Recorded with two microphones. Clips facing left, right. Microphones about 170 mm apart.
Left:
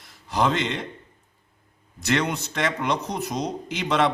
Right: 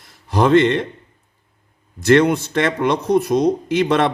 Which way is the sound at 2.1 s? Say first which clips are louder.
Right 11 dB; 55° right (ahead or behind).